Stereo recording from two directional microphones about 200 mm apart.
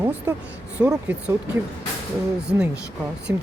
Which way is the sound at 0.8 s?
5° right (ahead or behind).